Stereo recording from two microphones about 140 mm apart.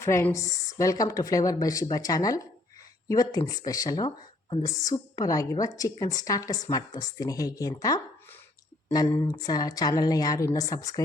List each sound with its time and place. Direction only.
0.0 s a woman's voice: 20° left (ahead or behind)